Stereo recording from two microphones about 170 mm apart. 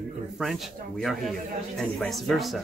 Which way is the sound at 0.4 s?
Centre (ahead or behind).